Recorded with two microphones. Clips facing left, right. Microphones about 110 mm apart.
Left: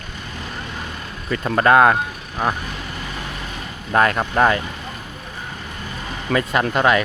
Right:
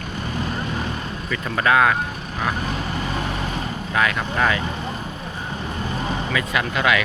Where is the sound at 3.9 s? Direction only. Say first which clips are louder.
Left 5 dB; 40° left (ahead or behind).